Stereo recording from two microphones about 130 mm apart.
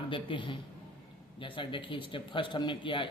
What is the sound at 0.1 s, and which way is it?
Speech, 40° left (ahead or behind).